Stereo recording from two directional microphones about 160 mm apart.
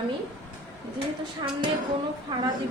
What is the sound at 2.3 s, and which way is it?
Speech, 25° right (ahead or behind).